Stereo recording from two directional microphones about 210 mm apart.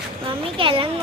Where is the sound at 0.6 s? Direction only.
25° right (ahead or behind).